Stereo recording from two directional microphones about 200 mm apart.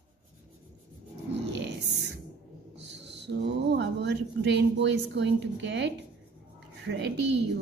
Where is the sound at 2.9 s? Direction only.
60° right (ahead or behind).